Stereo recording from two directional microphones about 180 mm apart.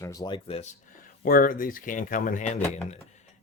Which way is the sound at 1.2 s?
50° left (ahead or behind).